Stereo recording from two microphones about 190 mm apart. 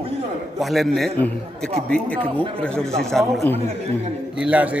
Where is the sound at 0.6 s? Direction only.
Centre (ahead or behind).